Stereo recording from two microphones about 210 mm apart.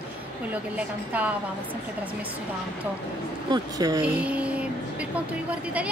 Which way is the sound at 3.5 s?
15° right (ahead or behind).